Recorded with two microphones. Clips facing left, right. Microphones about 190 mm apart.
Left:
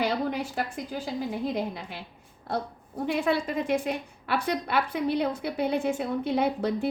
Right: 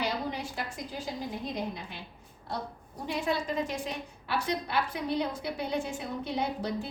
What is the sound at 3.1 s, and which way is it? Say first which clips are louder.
A woman's voice: left 4 dB; 60° left (ahead or behind).